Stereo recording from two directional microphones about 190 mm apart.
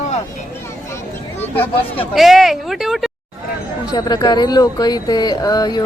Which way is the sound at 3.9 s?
20° left (ahead or behind).